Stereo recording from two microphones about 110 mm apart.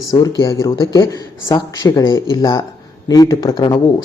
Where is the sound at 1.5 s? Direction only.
45° left (ahead or behind).